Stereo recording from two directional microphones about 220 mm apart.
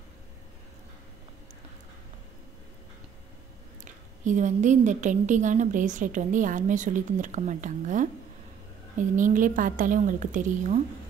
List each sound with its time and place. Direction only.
3.8 s a woman's voice: 35° right (ahead or behind)